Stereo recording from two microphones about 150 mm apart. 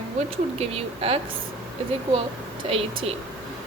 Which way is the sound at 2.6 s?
40° right (ahead or behind).